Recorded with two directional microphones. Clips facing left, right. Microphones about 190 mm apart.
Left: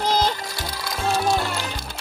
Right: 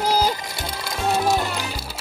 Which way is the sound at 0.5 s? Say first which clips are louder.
Right 1 dB; 25° right (ahead or behind).